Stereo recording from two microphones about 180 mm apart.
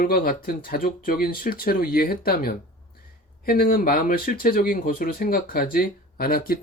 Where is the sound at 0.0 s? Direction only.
55° left (ahead or behind).